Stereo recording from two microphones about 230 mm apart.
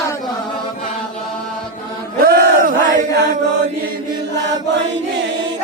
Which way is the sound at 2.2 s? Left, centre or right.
Right.